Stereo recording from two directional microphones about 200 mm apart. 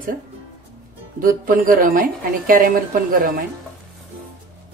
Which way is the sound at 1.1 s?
45° right (ahead or behind).